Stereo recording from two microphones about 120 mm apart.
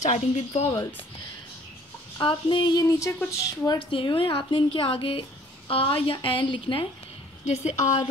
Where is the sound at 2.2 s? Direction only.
45° left (ahead or behind).